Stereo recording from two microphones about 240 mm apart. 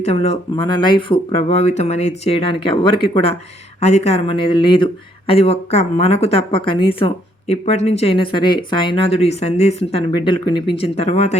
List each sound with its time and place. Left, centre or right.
0.0 s speech: left